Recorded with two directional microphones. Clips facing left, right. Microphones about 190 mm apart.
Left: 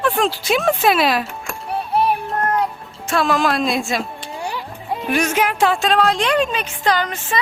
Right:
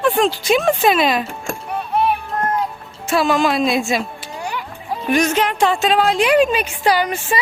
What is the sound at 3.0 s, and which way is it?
A woman's voice, 5° right (ahead or behind).